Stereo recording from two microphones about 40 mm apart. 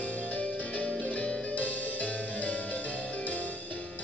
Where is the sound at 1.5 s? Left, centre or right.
Left.